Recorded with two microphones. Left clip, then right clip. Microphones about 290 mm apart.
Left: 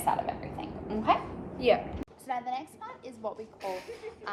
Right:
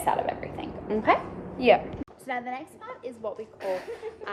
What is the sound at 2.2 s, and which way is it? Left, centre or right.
Speech, centre.